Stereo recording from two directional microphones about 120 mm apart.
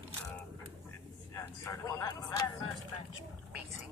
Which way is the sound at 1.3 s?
25° left (ahead or behind).